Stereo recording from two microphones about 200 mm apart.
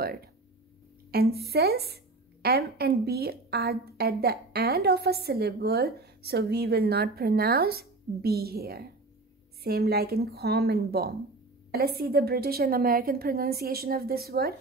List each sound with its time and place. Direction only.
0.0 s a woman's voice: 50° right (ahead or behind)